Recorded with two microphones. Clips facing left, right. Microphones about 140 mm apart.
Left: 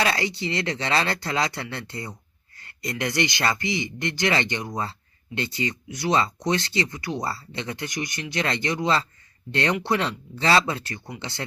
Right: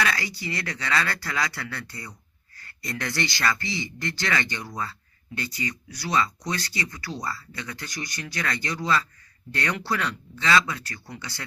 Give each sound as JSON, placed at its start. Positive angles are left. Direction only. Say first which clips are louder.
{"t": 0.0, "sound": "speech", "louder": "left 4 dB", "side_deg": 25}